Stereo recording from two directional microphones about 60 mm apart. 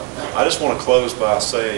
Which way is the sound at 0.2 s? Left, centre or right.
Right.